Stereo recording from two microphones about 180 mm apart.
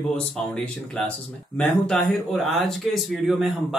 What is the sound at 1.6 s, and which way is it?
Speech, 10° left (ahead or behind).